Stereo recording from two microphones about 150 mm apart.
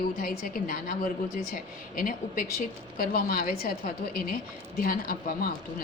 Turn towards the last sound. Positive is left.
turn(degrees=75)  # may be behind; listen again after turning